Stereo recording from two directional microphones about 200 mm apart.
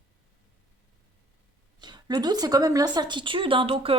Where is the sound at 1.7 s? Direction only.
20° right (ahead or behind).